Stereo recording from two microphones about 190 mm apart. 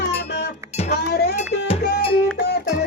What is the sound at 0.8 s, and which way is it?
Speech, 60° left (ahead or behind).